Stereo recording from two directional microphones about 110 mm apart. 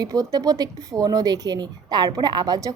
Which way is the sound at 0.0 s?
35° right (ahead or behind).